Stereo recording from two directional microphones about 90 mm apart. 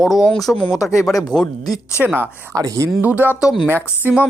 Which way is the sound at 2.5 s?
40° right (ahead or behind).